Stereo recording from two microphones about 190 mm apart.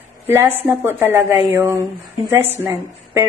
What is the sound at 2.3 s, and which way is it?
Speech, 10° right (ahead or behind).